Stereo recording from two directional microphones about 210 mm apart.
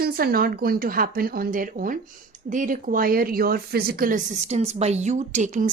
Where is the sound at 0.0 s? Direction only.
45° right (ahead or behind).